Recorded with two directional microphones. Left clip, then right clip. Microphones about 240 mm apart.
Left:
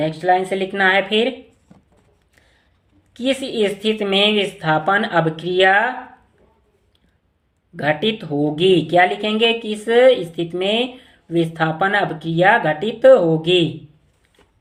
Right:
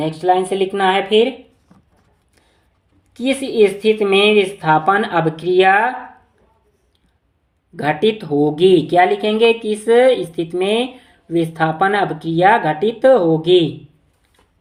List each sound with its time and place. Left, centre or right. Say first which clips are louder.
0.0 s speech: right 1 dB; centre
3.1 s speech: right 1 dB; centre
7.8 s speech: right 3 dB; centre